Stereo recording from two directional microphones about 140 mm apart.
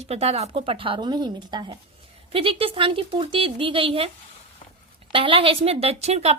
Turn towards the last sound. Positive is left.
turn(degrees=-50)  # may be behind; listen again after turning